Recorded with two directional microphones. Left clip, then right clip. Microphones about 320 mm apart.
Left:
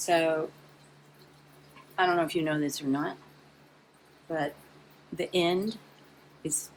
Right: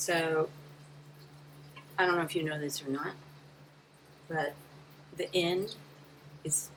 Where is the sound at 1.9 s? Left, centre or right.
Centre.